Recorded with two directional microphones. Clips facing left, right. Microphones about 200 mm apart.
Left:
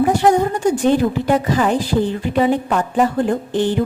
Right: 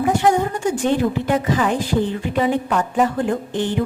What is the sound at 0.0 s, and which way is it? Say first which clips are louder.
A woman's voice: left 3 dB; 35° left (ahead or behind).